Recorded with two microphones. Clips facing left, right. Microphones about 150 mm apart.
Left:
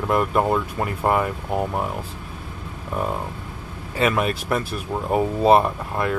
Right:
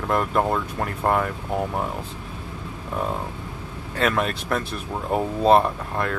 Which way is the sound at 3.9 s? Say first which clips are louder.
Left 2 dB; 5° left (ahead or behind).